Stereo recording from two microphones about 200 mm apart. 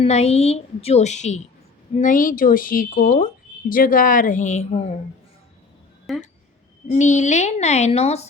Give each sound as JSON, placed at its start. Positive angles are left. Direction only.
{"t": 0.0, "sound": "a woman's voice", "side_deg": 30}
{"t": 6.1, "sound": "speech", "side_deg": 0}
{"t": 6.9, "sound": "a woman's voice", "side_deg": 35}